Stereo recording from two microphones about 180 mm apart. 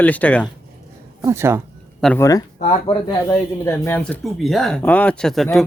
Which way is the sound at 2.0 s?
Centre (ahead or behind).